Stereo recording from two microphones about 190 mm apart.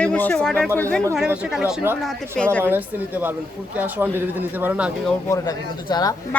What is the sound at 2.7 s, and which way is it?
Speech, 10° right (ahead or behind).